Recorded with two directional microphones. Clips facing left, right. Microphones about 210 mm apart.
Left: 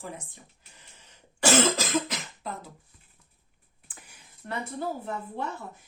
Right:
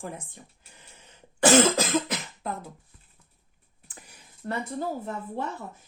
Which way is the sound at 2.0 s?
55° right (ahead or behind).